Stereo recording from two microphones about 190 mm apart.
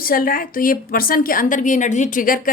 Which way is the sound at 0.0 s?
50° left (ahead or behind).